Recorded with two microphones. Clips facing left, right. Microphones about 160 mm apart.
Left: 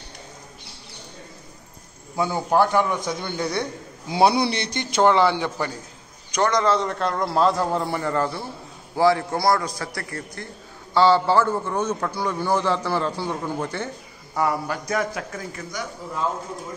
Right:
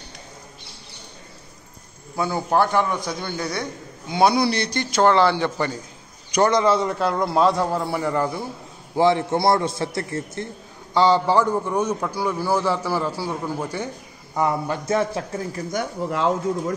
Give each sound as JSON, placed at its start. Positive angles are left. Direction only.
{"t": 2.5, "sound": "a man's voice", "side_deg": 10}
{"t": 6.3, "sound": "a man's voice", "side_deg": -5}
{"t": 14.3, "sound": "a man's voice", "side_deg": -20}
{"t": 15.7, "sound": "speech", "side_deg": -65}